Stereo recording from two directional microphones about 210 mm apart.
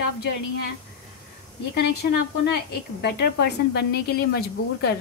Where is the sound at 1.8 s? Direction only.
50° left (ahead or behind).